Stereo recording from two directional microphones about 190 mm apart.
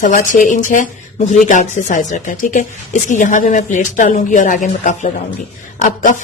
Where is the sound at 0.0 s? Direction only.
45° left (ahead or behind).